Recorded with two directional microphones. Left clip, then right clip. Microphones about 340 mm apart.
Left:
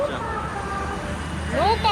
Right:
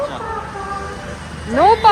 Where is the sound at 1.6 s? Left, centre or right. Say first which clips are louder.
Right 9 dB; right.